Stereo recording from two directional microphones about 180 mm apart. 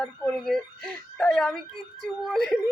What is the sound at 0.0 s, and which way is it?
Speech, centre (ahead or behind).